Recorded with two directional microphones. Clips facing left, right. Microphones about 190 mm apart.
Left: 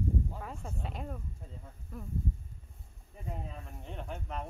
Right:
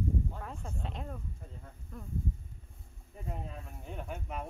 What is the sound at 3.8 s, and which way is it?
Speech, 5° right (ahead or behind).